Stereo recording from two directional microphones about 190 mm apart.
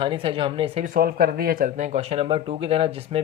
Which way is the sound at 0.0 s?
25° right (ahead or behind).